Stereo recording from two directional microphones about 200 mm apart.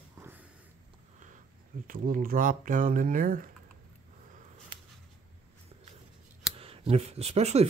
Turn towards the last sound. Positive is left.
turn(degrees=-30)  # may be behind; listen again after turning